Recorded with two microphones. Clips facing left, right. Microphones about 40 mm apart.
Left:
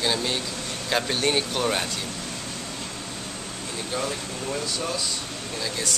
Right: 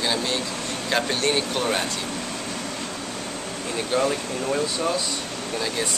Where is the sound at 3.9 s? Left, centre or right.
Right.